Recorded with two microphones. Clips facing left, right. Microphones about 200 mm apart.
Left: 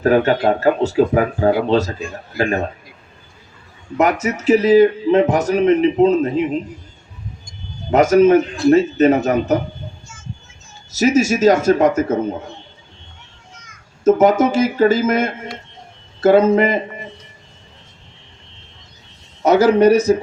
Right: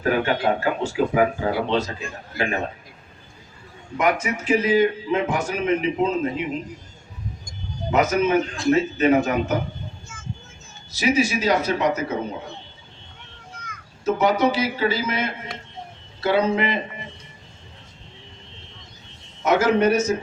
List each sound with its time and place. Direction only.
0.0 s a man's voice: 40° left (ahead or behind)
3.9 s a man's voice: 40° left (ahead or behind)
8.1 s a man's voice: 45° left (ahead or behind)
10.9 s speech: 45° left (ahead or behind)
14.0 s speech: 45° left (ahead or behind)
19.4 s a man's voice: 35° left (ahead or behind)